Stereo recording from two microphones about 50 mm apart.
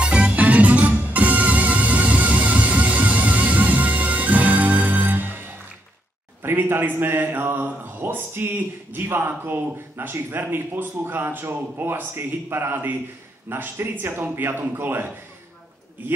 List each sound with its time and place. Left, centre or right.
0.0 s music: right
6.4 s speech: right